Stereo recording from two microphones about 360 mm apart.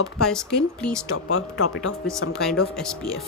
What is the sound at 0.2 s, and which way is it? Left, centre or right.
Speech, centre.